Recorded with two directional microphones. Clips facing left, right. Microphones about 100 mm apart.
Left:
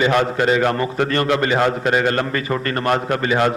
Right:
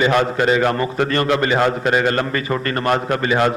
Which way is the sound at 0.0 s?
30° right (ahead or behind).